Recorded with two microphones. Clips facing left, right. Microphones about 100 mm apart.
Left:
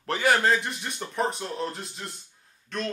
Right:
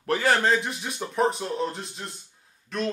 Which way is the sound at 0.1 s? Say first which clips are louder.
Right 1 dB; 15° left (ahead or behind).